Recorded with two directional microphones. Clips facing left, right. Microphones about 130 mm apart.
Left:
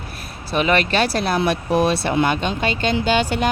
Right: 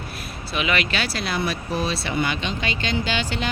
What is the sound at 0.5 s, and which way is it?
Speech, 40° left (ahead or behind).